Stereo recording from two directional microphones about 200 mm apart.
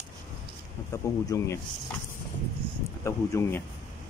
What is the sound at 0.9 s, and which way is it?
Speech, 15° left (ahead or behind).